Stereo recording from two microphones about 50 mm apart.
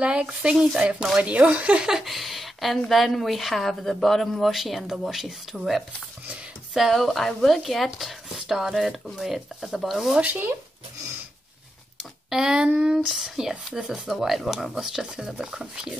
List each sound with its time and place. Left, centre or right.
0.0 s speech: right
1.3 s speech: right
1.9 s speech: centre
10.2 s speech: right
12.0 s speech: centre
12.9 s speech: centre